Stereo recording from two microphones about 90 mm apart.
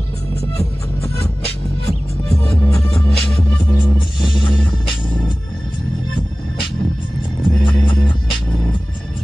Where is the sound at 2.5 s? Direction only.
15° left (ahead or behind).